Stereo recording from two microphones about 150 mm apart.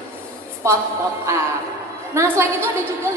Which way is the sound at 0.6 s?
20° right (ahead or behind).